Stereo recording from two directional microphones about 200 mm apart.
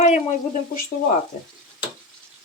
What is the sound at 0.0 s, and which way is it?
Speech, 35° left (ahead or behind).